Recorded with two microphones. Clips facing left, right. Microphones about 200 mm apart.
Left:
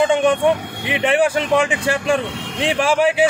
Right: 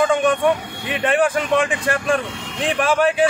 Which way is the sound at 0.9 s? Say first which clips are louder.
Left 1 dB; 25° left (ahead or behind).